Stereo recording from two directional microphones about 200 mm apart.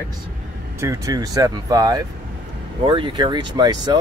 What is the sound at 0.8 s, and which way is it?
Speech, 15° right (ahead or behind).